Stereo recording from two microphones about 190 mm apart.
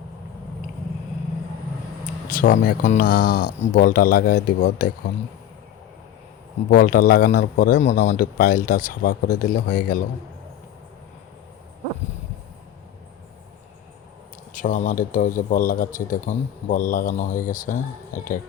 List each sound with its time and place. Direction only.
2.3 s speech: 45° left (ahead or behind)
6.7 s speech: 50° left (ahead or behind)
14.5 s speech: 40° left (ahead or behind)